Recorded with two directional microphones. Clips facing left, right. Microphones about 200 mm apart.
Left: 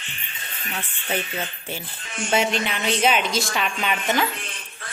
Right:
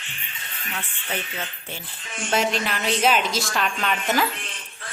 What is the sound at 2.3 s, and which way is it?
A woman's voice, centre (ahead or behind).